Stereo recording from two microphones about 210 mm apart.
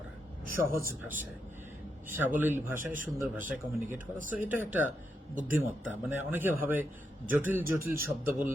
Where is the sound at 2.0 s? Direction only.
10° right (ahead or behind).